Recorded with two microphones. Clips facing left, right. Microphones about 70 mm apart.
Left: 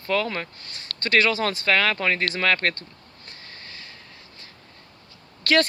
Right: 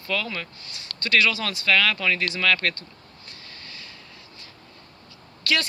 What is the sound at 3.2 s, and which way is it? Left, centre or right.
Vehicle, left.